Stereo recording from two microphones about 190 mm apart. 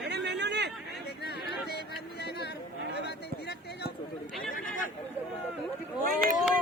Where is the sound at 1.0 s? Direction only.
60° left (ahead or behind).